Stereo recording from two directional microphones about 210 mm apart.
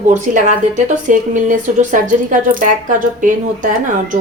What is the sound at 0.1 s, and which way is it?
Speech, 35° right (ahead or behind).